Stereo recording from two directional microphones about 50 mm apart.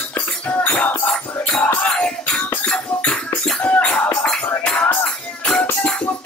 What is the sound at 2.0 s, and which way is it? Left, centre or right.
Music, centre.